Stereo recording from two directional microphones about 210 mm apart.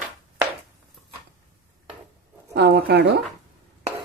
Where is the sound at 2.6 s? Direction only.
50° right (ahead or behind).